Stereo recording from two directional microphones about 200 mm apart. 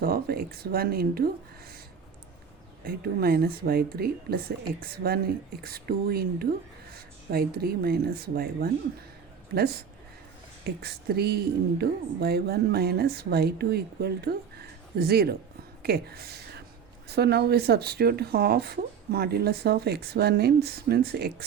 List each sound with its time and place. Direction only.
0.0 s a woman's voice: 50° right (ahead or behind)
2.8 s a woman's voice: 50° right (ahead or behind)
10.6 s a woman's voice: 50° right (ahead or behind)